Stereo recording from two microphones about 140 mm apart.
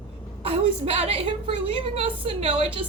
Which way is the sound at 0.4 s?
40° right (ahead or behind).